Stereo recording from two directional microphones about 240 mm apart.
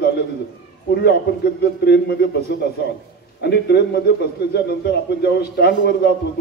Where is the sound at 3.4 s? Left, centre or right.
Left.